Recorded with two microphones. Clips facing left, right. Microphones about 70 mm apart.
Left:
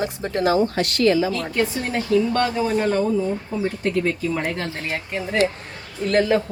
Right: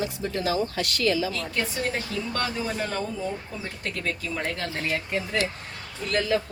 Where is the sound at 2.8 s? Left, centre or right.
Centre.